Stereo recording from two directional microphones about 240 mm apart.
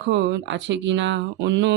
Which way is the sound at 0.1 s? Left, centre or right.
Right.